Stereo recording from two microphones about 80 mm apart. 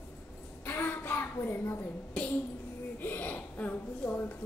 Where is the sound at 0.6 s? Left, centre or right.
Left.